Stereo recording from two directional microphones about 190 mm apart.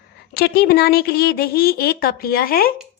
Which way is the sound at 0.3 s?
55° left (ahead or behind).